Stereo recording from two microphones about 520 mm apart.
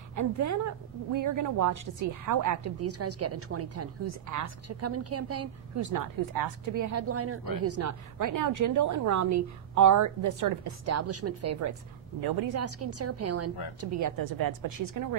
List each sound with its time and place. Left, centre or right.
0.1 s a woman's voice: right
12.2 s a woman's voice: right